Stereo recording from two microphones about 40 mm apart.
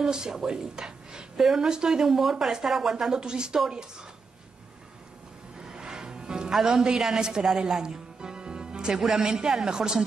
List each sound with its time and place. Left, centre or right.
0.0 s speech: centre
5.6 s music: centre
6.5 s speech: centre
7.4 s music: centre
8.9 s speech: centre